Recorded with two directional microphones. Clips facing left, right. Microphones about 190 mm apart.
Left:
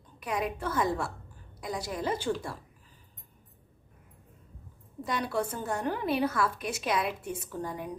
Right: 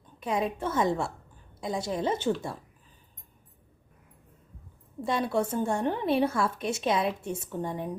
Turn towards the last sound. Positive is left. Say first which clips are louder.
# right 3 dB
turn(degrees=-25)  # may be behind; listen again after turning